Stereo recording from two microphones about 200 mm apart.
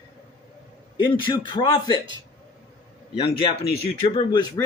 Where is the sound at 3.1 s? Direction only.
25° left (ahead or behind).